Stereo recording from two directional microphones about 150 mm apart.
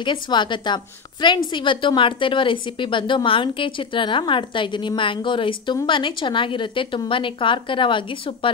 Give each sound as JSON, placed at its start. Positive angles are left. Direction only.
{"t": 0.0, "sound": "a woman's voice", "side_deg": 30}